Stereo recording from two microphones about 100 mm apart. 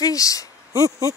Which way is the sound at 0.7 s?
35° right (ahead or behind).